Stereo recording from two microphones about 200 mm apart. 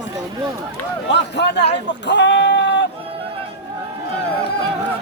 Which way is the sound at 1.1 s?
60° left (ahead or behind).